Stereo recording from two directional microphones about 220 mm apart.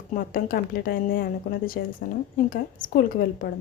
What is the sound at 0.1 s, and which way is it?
A woman's voice, 40° left (ahead or behind).